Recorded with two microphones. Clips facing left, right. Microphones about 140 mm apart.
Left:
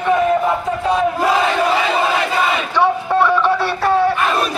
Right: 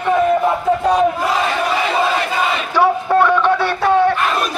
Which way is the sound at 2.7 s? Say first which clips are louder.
Right 3 dB; centre (ahead or behind).